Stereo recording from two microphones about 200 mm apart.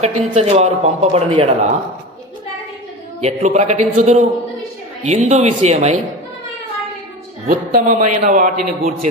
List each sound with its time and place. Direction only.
0.3 s speech: 35° right (ahead or behind)
3.2 s speech: 35° right (ahead or behind)
7.4 s speech: 40° right (ahead or behind)